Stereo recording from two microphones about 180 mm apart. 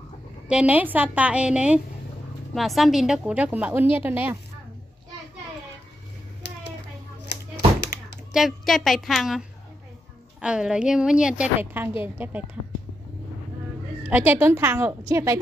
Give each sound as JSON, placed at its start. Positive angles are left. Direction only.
{"t": 0.5, "sound": "a woman's voice", "side_deg": -5}
{"t": 6.4, "sound": "a sound", "side_deg": 75}
{"t": 8.3, "sound": "a woman's voice", "side_deg": 0}
{"t": 14.0, "sound": "a woman's voice", "side_deg": -10}